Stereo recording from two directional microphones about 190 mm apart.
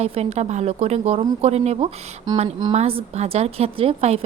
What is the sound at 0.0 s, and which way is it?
A woman's voice, 35° right (ahead or behind).